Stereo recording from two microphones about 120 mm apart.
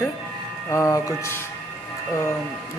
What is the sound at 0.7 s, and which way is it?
Speech, 25° left (ahead or behind).